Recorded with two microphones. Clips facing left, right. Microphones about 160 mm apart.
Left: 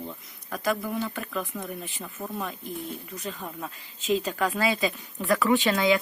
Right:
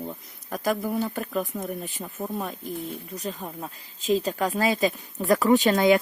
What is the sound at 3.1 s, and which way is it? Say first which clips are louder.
Speech: right 2 dB; 40° right (ahead or behind).